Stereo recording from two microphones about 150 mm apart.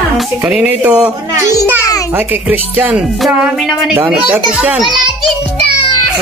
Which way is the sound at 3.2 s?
Centre (ahead or behind).